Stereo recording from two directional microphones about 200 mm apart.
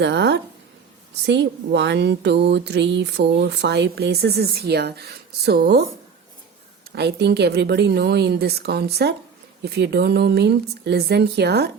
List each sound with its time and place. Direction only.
0.0 s speech: 60° right (ahead or behind)
6.9 s speech: 55° right (ahead or behind)